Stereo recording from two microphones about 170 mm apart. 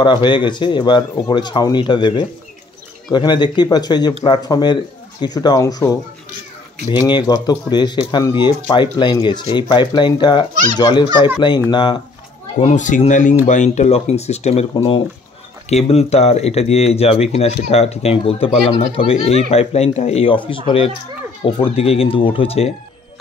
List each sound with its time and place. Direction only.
0.0 s speech: 25° left (ahead or behind)
12.5 s speech: 45° left (ahead or behind)